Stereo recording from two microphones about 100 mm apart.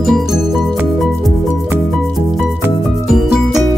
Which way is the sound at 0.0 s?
5° right (ahead or behind).